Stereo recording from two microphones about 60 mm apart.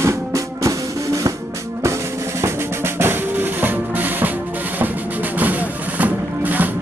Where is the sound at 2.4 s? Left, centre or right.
Right.